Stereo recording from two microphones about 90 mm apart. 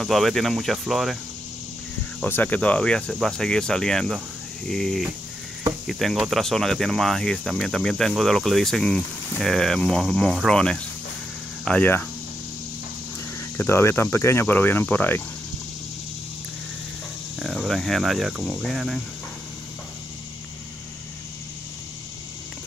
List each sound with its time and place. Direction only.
0.0 s cricket: centre (ahead or behind)
2.2 s speech: 20° left (ahead or behind); by 4.2 s 5° left (ahead or behind)
4.6 s cricket: 5° left (ahead or behind)
10.3 s speech: 5° left (ahead or behind)
11.8 s cricket: 20° left (ahead or behind)
13.6 s cricket: 30° left (ahead or behind)
17.4 s speech: centre (ahead or behind)
18.6 s cricket: centre (ahead or behind)